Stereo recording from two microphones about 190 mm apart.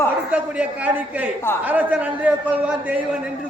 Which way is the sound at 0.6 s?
10° right (ahead or behind).